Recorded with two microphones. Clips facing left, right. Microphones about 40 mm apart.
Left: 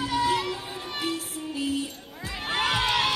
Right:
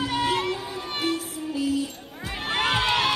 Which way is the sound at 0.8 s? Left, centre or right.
Right.